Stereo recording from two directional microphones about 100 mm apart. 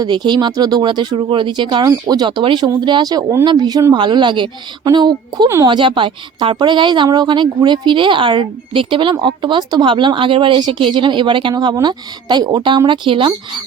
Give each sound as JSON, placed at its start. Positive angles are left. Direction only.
{"t": 0.0, "sound": "speech", "side_deg": -45}
{"t": 1.9, "sound": "speech", "side_deg": -40}